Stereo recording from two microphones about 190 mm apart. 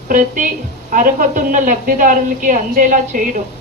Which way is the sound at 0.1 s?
45° right (ahead or behind).